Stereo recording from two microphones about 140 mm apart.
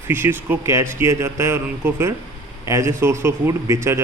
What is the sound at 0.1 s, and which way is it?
Speech, 15° right (ahead or behind).